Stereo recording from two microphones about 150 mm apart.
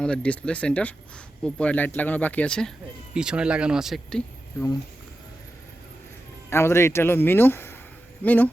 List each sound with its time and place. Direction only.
0.0 s speech: 5° left (ahead or behind)
3.2 s speech: 5° right (ahead or behind)
6.5 s speech: 15° left (ahead or behind)